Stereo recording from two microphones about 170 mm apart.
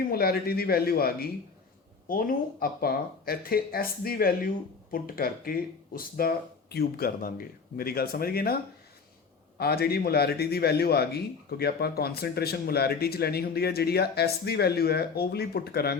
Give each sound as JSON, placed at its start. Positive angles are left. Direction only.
{"t": 0.1, "sound": "speech", "side_deg": 65}
{"t": 9.6, "sound": "a man's voice", "side_deg": 65}